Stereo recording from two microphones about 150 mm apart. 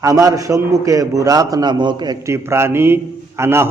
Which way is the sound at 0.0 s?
20° right (ahead or behind).